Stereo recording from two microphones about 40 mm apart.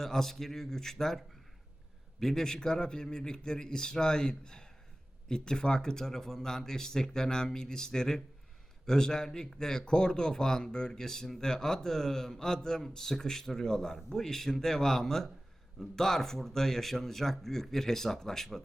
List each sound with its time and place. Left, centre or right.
0.0 s speech: centre